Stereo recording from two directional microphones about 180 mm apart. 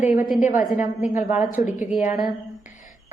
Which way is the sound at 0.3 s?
45° left (ahead or behind).